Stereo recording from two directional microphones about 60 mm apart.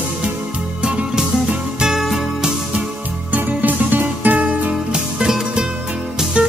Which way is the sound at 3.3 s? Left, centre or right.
Right.